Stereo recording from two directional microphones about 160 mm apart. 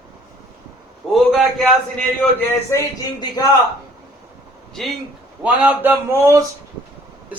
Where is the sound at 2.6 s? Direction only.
20° left (ahead or behind).